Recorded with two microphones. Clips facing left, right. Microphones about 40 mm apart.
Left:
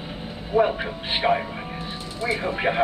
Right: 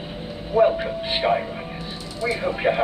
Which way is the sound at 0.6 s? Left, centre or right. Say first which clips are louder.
Right 3 dB; centre.